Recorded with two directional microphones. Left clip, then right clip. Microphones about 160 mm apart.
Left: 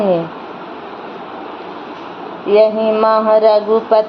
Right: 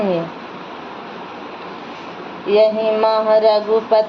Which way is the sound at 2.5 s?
35° left (ahead or behind).